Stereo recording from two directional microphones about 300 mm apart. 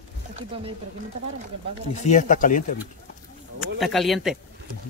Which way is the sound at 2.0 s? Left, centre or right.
Left.